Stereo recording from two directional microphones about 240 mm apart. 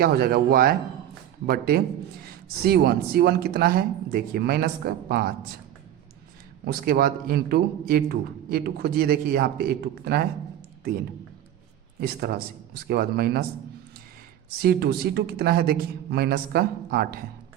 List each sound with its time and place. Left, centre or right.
0.0 s speech: right
6.7 s speech: right
11.9 s speech: right
14.6 s speech: right